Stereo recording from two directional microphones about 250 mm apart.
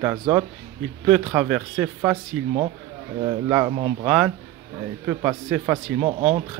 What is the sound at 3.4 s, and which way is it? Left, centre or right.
A man's voice, centre.